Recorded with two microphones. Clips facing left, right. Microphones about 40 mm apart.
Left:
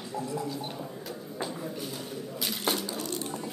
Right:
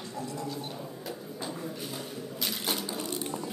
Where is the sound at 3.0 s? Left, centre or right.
Centre.